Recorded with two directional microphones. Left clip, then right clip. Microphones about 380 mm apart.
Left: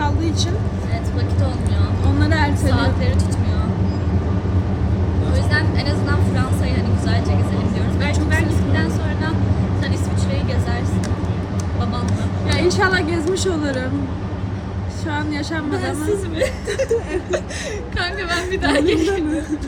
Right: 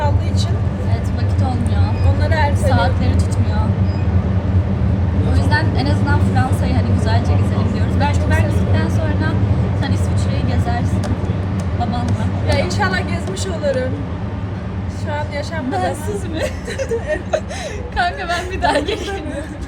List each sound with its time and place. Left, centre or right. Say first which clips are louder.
2.6 s a sound: right 3 dB; centre
5.5 s vehicle: right 3 dB; centre
8.7 s vehicle: right 1 dB; centre
12.5 s a woman's voice: left 3 dB; centre
18.6 s a woman's voice: even; centre